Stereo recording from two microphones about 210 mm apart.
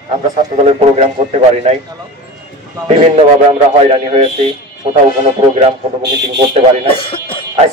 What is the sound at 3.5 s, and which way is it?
Speech, 30° right (ahead or behind).